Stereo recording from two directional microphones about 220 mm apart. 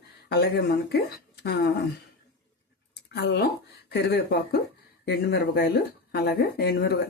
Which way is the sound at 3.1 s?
50° left (ahead or behind).